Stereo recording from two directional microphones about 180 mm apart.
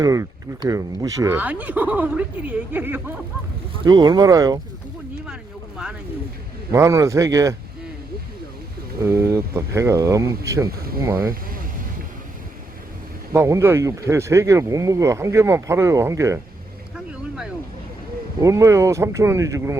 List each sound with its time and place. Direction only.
0.0 s speech: 20° right (ahead or behind)
3.8 s speech: 25° right (ahead or behind)
5.2 s boat: 5° right (ahead or behind)
6.7 s speech: 15° right (ahead or behind)
9.0 s speech: 15° right (ahead or behind)
11.3 s speech: 50° right (ahead or behind)
13.3 s speech: 15° right (ahead or behind)
18.4 s speech: 15° right (ahead or behind)